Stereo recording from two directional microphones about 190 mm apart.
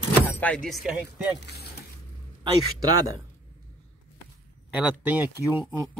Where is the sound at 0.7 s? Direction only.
5° right (ahead or behind).